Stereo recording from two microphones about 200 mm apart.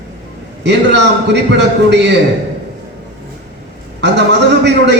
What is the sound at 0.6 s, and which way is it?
A man's voice, 60° right (ahead or behind).